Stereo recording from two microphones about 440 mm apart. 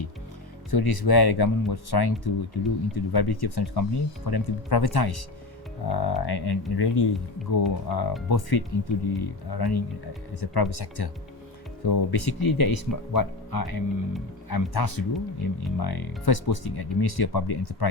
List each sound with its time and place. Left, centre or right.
0.7 s speech: left